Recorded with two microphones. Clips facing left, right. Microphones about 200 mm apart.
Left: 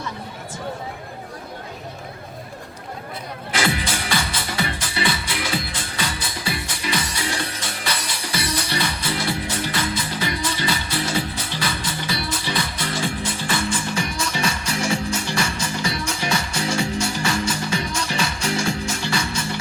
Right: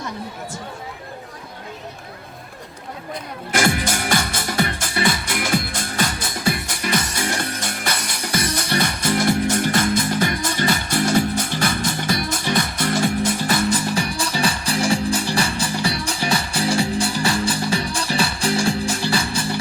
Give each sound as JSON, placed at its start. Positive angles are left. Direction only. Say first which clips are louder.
{"t": 3.5, "sound": "music", "louder": "right 4 dB", "side_deg": -45}